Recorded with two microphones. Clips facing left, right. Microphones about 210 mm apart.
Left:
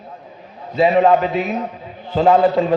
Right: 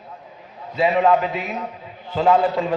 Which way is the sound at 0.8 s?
35° left (ahead or behind).